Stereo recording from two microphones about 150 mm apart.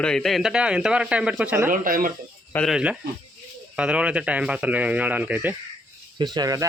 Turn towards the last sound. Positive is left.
turn(degrees=-25)  # may be behind; listen again after turning